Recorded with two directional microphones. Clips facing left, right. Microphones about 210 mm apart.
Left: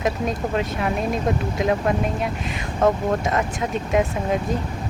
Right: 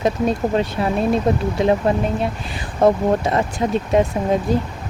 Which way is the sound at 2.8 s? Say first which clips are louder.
Right 4 dB; 30° right (ahead or behind).